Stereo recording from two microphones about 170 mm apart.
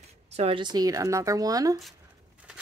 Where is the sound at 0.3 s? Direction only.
35° right (ahead or behind); by 1.8 s 20° right (ahead or behind).